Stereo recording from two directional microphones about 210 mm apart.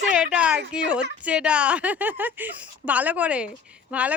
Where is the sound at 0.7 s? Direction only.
5° right (ahead or behind).